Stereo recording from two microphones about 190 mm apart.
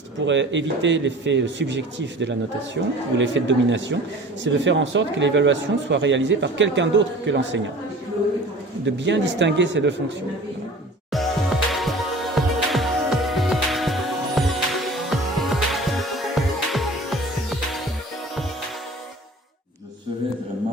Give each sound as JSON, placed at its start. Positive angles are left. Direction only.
{"t": 0.3, "sound": "speech", "side_deg": -75}
{"t": 9.0, "sound": "speech", "side_deg": -70}
{"t": 11.1, "sound": "music", "side_deg": 0}